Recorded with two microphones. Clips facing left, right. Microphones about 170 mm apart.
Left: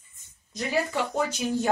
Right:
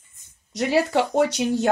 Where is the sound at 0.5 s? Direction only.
75° right (ahead or behind).